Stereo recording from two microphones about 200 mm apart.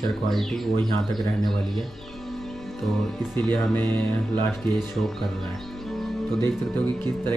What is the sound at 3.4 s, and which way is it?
Speech, 5° left (ahead or behind).